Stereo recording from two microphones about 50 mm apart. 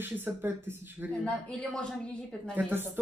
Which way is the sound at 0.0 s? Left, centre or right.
Right.